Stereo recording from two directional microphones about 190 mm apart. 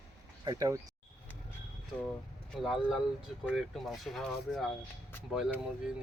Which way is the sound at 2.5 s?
Centre (ahead or behind).